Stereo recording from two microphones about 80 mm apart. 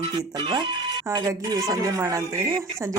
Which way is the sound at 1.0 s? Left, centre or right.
Right.